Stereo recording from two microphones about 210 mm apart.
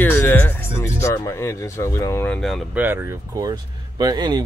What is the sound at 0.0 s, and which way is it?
Speech, 10° left (ahead or behind).